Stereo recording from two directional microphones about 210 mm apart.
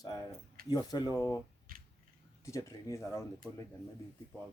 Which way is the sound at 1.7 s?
40° right (ahead or behind).